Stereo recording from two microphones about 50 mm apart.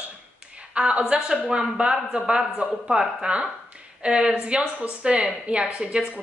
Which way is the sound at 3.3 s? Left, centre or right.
Right.